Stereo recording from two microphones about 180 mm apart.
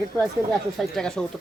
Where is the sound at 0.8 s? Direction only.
5° left (ahead or behind).